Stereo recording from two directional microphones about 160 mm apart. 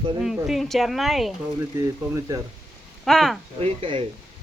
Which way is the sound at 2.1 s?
20° right (ahead or behind).